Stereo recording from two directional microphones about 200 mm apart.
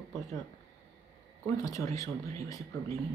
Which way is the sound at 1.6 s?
15° left (ahead or behind).